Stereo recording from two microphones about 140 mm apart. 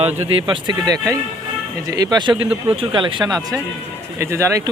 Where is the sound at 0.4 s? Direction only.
35° right (ahead or behind).